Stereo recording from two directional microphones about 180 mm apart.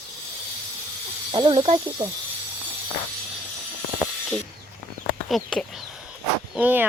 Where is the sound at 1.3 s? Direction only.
25° right (ahead or behind).